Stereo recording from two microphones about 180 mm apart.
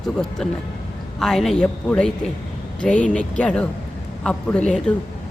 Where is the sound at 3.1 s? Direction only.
5° left (ahead or behind).